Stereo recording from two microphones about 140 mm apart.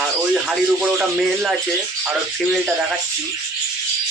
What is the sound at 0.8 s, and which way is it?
Speech, 10° right (ahead or behind).